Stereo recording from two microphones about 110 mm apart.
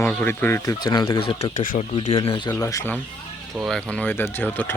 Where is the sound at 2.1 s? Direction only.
50° left (ahead or behind).